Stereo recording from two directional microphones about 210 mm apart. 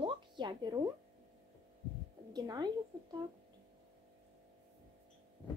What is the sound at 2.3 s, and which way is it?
Speech, 20° right (ahead or behind).